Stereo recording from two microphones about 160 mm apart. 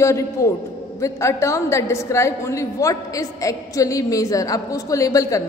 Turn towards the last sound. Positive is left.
turn(degrees=20)  # may be behind; listen again after turning